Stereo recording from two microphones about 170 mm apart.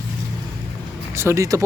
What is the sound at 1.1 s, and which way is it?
Speech, 15° right (ahead or behind).